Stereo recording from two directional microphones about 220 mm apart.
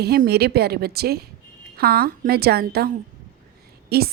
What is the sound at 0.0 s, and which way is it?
Speech, 45° right (ahead or behind).